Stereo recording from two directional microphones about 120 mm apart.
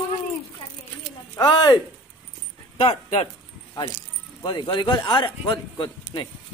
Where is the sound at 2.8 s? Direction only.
50° left (ahead or behind).